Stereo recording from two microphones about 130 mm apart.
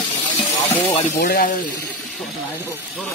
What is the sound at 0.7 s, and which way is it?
Speech, 20° left (ahead or behind).